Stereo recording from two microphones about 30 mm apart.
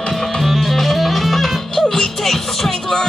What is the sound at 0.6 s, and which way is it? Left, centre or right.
Music, centre.